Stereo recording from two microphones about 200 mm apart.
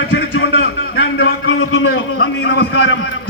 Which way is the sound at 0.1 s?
70° left (ahead or behind).